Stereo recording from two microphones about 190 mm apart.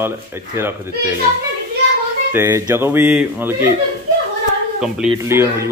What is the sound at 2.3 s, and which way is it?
Speech, 15° right (ahead or behind).